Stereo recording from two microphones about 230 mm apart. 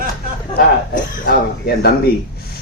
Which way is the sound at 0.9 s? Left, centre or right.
Left.